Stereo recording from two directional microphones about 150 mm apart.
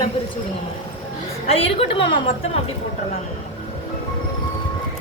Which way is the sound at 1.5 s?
40° left (ahead or behind).